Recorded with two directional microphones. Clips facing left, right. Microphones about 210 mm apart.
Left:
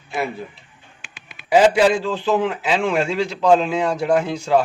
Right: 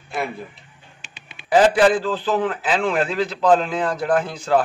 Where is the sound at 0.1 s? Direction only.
Centre (ahead or behind).